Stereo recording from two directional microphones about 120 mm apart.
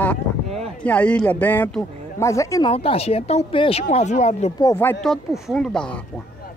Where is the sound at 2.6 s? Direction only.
50° left (ahead or behind); by 4.5 s 75° left (ahead or behind).